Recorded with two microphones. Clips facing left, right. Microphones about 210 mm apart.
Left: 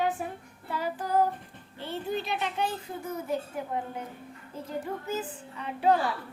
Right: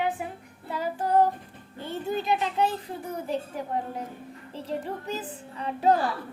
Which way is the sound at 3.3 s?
35° right (ahead or behind).